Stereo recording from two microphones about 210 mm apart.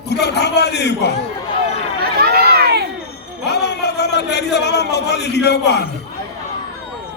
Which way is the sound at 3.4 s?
50° left (ahead or behind).